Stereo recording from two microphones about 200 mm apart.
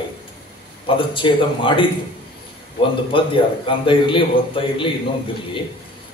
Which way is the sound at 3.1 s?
25° left (ahead or behind).